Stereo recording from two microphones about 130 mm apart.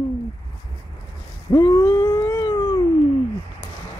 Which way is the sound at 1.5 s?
25° left (ahead or behind).